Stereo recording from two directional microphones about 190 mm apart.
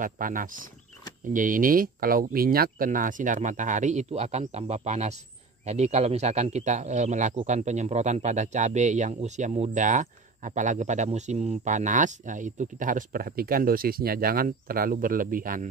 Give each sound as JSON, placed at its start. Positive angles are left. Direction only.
{"t": 0.0, "sound": "a man's voice", "side_deg": -45}